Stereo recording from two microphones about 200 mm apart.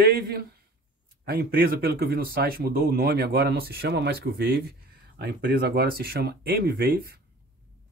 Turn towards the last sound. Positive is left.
turn(degrees=-45)  # may be behind; listen again after turning